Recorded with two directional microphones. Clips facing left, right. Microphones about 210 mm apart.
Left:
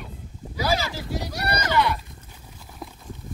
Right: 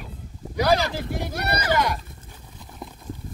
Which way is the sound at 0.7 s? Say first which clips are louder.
Right 4 dB; 55° right (ahead or behind).